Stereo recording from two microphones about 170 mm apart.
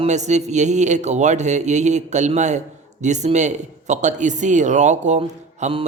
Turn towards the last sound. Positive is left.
turn(degrees=-45)  # may be behind; listen again after turning